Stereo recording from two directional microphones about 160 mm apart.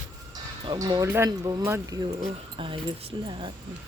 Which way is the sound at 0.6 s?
25° right (ahead or behind).